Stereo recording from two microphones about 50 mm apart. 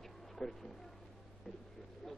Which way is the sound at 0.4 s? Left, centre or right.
Centre.